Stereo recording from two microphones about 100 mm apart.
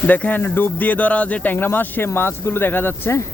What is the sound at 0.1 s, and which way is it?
Speech, 15° left (ahead or behind).